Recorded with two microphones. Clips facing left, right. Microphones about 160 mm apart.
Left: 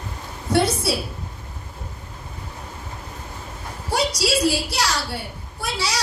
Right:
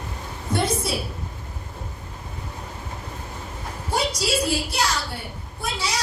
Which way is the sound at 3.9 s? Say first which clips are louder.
Left 2 dB; 80° left.